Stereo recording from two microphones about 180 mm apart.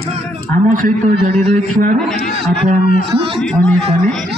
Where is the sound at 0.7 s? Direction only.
45° right (ahead or behind).